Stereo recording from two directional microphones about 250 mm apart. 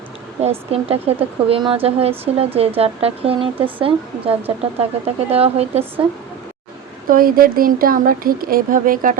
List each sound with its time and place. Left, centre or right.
0.4 s speech: right
7.1 s speech: right